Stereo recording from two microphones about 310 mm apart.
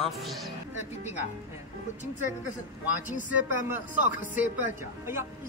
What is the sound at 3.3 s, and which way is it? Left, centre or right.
Speech, centre.